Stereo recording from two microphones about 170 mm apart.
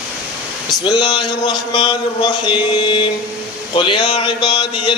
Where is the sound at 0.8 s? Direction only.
25° left (ahead or behind).